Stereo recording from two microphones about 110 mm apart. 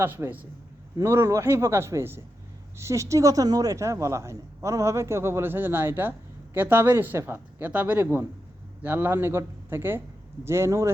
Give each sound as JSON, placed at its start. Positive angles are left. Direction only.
{"t": 0.0, "sound": "a man's voice", "side_deg": -20}